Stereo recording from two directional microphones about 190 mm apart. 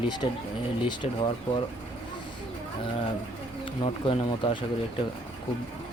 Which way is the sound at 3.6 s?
25° left (ahead or behind).